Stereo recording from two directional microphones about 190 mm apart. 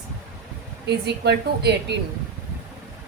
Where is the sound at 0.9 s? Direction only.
60° right (ahead or behind).